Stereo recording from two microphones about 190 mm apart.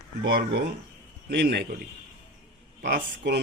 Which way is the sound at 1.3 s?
60° right (ahead or behind).